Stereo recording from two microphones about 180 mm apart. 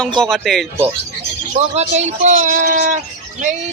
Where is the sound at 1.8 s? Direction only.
40° right (ahead or behind).